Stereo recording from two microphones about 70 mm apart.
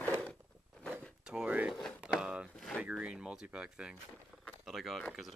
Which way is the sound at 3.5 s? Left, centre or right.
Centre.